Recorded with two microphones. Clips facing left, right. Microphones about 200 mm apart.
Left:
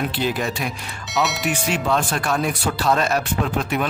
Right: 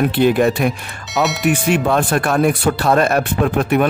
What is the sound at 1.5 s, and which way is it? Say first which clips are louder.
Speech: right 6 dB; 55° right (ahead or behind).